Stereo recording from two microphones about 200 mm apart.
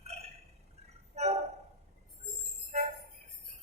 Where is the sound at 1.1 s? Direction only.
35° right (ahead or behind).